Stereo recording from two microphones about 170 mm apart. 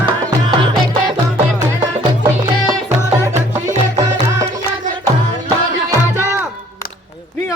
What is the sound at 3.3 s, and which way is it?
Music, 45° right (ahead or behind).